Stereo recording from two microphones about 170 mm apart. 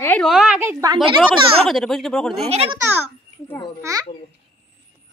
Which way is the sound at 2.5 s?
35° right (ahead or behind).